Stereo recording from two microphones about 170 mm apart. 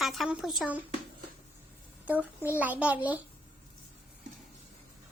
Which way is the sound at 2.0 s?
10° right (ahead or behind).